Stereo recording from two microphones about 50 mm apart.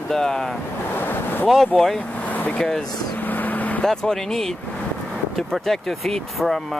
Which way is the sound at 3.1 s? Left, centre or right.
Left.